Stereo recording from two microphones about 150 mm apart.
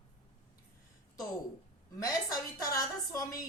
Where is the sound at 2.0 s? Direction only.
25° left (ahead or behind).